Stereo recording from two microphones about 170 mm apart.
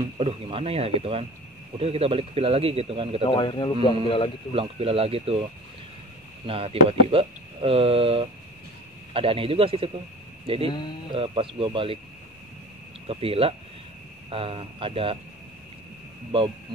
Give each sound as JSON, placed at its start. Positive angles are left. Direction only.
{"t": 0.2, "sound": "speech", "side_deg": -35}
{"t": 3.3, "sound": "a man's voice", "side_deg": 30}
{"t": 4.6, "sound": "speech", "side_deg": -35}
{"t": 13.0, "sound": "speech", "side_deg": -35}